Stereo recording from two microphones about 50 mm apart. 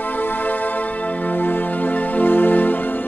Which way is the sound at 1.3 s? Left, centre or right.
Left.